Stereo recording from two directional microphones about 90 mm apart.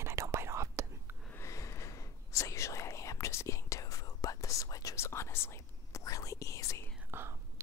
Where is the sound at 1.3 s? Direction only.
35° left (ahead or behind).